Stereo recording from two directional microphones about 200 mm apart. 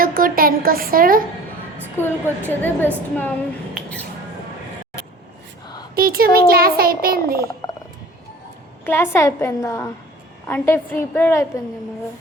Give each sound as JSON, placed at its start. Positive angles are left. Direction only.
{"t": 0.0, "sound": "a woman's voice", "side_deg": -45}
{"t": 2.0, "sound": "a woman's voice", "side_deg": 10}
{"t": 5.9, "sound": "a woman's voice", "side_deg": -50}
{"t": 8.8, "sound": "a woman's voice", "side_deg": 10}